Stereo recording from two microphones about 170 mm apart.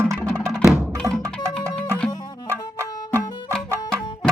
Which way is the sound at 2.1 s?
20° left (ahead or behind).